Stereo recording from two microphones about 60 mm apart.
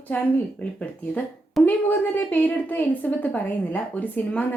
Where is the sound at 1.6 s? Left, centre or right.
Left.